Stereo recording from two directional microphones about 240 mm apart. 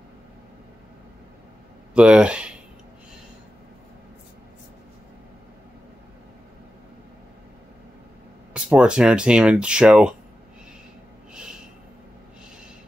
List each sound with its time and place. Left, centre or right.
2.0 s speech: centre
8.5 s speech: centre